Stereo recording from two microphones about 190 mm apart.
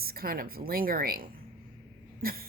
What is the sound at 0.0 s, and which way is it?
A woman's voice, 50° right (ahead or behind).